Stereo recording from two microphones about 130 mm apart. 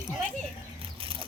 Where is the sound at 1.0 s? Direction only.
45° right (ahead or behind).